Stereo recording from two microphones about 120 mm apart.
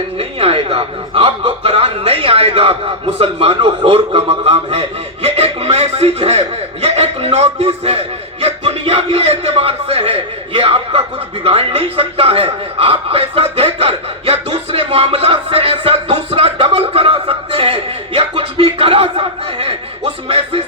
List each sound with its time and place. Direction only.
0.2 s a man's voice: 50° right (ahead or behind)
11.4 s a sound: 50° right (ahead or behind)
20.2 s music: 50° right (ahead or behind)